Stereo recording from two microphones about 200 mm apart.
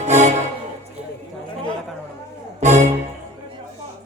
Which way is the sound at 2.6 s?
35° right (ahead or behind).